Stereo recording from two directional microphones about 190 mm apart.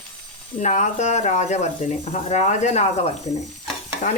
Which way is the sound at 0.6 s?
40° left (ahead or behind).